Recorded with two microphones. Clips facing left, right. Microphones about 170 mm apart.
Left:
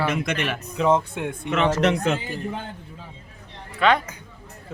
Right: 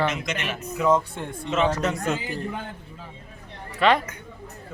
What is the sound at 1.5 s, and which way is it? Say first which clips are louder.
Speech: left 2 dB; 80° left.